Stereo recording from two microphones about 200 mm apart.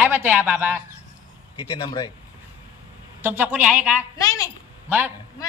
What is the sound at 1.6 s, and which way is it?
Speech, 25° left (ahead or behind).